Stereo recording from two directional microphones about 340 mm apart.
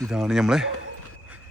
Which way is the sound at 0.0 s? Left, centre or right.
Centre.